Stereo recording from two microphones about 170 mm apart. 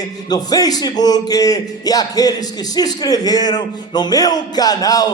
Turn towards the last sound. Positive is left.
turn(degrees=20)  # may be behind; listen again after turning